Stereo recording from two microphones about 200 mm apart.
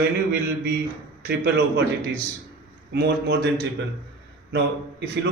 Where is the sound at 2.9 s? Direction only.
55° right (ahead or behind).